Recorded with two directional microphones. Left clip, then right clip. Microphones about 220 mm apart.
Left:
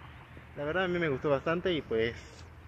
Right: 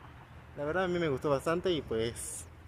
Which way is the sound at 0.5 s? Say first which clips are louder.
Left 1 dB; 10° right (ahead or behind).